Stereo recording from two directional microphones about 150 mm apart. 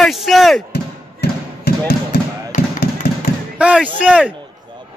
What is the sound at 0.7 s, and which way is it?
Basketball bounce, 90° left.